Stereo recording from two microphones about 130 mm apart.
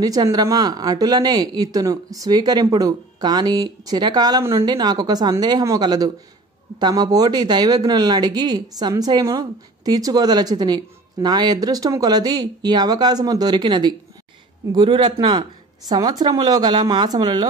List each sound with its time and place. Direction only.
0.0 s speech: 30° right (ahead or behind)